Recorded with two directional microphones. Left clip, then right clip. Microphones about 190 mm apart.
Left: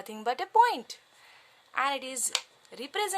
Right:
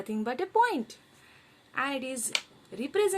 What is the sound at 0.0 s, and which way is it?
A woman's voice, 35° left (ahead or behind).